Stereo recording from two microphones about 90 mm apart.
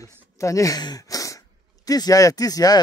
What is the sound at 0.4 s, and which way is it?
Speech, 35° left (ahead or behind).